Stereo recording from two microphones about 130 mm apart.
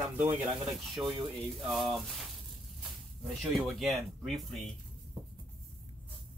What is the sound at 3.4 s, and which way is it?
Speech, centre (ahead or behind).